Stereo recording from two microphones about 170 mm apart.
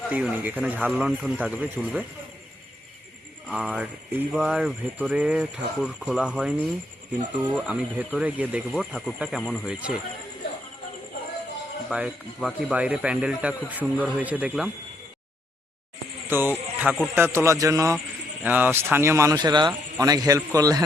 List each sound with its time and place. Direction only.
0.1 s speech: 10° right (ahead or behind)
3.5 s speech: 5° right (ahead or behind)
11.9 s speech: 5° right (ahead or behind)
16.3 s speech: 10° right (ahead or behind)